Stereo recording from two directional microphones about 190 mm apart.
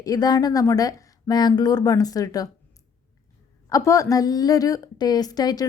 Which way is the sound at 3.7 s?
15° left (ahead or behind).